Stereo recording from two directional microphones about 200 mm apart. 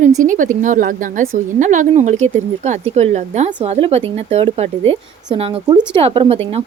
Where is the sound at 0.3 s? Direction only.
40° right (ahead or behind).